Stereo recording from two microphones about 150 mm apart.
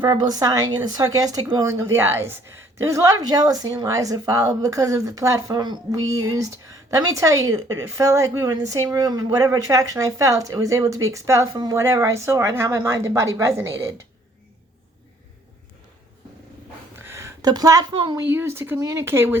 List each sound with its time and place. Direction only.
0.0 s a woman's voice: 25° right (ahead or behind)
16.9 s a sound: 15° right (ahead or behind)
17.9 s a woman's voice: 30° right (ahead or behind)
18.3 s speech: 15° right (ahead or behind)